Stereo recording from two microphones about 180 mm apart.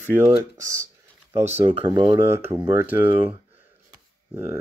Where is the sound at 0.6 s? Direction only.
15° right (ahead or behind).